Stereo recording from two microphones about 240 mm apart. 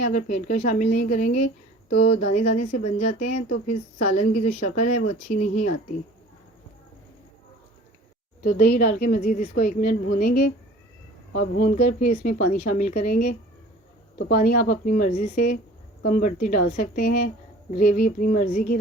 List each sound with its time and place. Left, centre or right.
0.0 s a woman's voice: left
8.4 s a woman's voice: left